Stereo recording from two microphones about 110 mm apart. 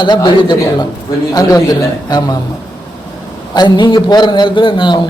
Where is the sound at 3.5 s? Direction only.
45° left (ahead or behind).